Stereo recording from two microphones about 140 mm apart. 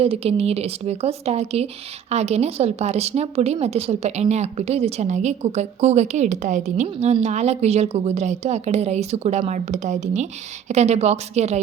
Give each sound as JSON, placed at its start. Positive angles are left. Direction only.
{"t": 0.0, "sound": "a woman's voice", "side_deg": -45}